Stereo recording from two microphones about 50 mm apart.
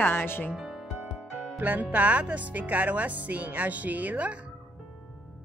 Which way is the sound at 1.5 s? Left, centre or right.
Right.